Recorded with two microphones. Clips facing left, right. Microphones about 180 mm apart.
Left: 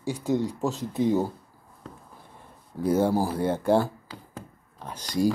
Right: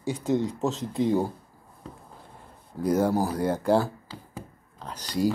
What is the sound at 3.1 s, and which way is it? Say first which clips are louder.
Speech: even; 10° left (ahead or behind).